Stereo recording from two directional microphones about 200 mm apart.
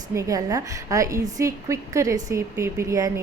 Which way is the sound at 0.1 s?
15° right (ahead or behind).